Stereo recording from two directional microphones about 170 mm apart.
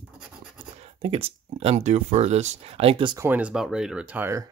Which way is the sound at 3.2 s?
10° right (ahead or behind).